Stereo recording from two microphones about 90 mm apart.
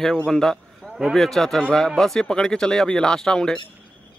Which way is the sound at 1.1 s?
5° left (ahead or behind).